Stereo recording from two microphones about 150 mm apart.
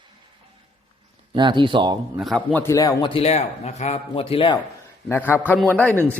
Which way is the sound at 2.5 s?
15° left (ahead or behind).